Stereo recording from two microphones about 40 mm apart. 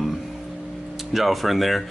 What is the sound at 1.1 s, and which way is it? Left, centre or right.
Speech, centre.